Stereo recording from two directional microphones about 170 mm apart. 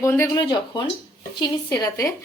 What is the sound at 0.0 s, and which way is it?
A woman's voice, 15° left (ahead or behind).